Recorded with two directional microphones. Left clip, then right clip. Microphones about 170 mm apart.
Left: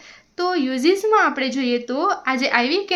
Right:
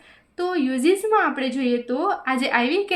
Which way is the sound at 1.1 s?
25° left (ahead or behind).